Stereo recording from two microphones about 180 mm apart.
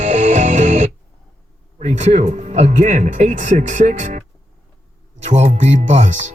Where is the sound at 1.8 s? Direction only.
40° right (ahead or behind).